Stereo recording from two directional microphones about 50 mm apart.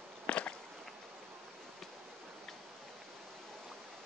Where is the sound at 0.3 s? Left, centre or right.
Left.